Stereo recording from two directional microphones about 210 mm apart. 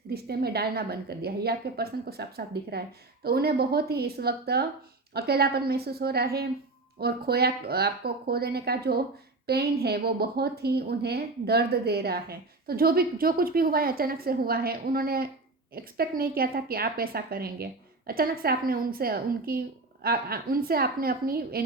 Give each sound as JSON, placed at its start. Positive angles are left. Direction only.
{"t": 0.1, "sound": "a woman's voice", "side_deg": -50}